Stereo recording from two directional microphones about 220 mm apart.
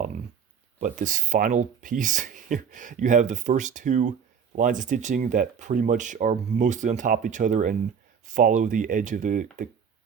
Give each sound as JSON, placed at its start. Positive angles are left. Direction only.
{"t": 0.8, "sound": "speech", "side_deg": -35}